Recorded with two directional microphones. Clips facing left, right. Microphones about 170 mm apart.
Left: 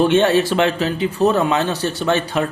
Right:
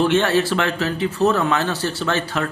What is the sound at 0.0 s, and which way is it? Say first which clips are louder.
A man's voice: left 3 dB; 20° left (ahead or behind).